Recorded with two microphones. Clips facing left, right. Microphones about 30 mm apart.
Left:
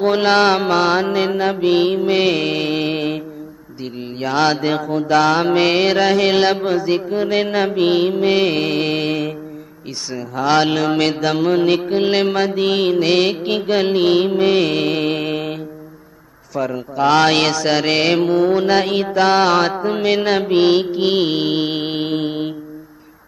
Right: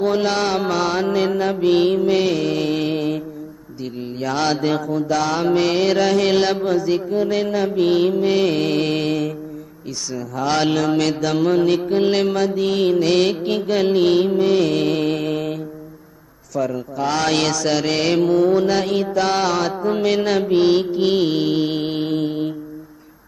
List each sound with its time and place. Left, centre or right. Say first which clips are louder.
0.0 s mantra: left 5 dB; left; by 2.0 s centre
2.0 s mantra: left 2 dB; left
4.2 s mantra: left 3 dB; left
4.8 s mantra: left 5 dB; left
20.3 s mantra: left 1 dB; left